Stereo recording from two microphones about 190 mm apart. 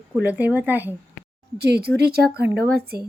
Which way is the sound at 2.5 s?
55° right (ahead or behind).